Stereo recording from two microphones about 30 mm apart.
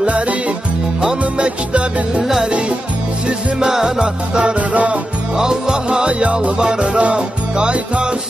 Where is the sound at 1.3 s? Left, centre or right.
Right.